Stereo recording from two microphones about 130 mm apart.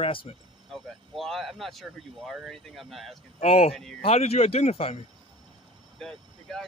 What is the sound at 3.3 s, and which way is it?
Speech, 50° left (ahead or behind).